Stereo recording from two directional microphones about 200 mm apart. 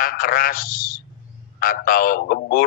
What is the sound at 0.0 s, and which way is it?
Speech, 45° left (ahead or behind).